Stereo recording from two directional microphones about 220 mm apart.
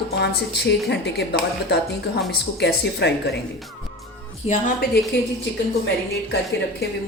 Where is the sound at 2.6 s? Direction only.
50° left (ahead or behind).